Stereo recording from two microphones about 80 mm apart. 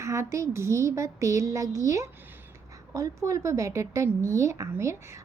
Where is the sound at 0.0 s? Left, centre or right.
Right.